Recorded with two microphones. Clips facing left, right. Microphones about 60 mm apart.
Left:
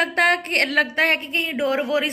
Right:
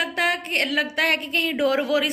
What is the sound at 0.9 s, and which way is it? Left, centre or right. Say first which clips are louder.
Speech: left 2 dB; left.